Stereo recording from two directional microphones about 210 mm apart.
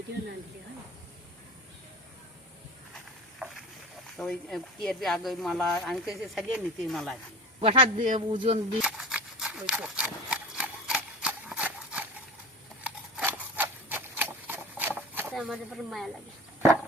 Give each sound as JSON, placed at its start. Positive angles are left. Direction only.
{"t": 3.4, "sound": "boat", "side_deg": -5}
{"t": 4.2, "sound": "speech", "side_deg": 0}
{"t": 7.6, "sound": "a man's voice", "side_deg": -25}
{"t": 7.9, "sound": "speech", "side_deg": -40}
{"t": 8.3, "sound": "a man's voice", "side_deg": -25}
{"t": 8.8, "sound": "rub", "side_deg": -5}
{"t": 12.8, "sound": "a sound", "side_deg": -5}